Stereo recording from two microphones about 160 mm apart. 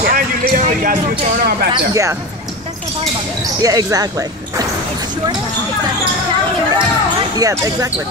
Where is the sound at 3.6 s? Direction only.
20° right (ahead or behind).